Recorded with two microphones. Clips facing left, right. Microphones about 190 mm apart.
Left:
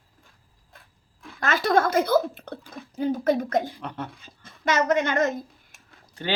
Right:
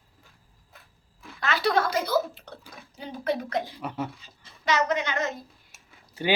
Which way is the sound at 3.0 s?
45° left (ahead or behind).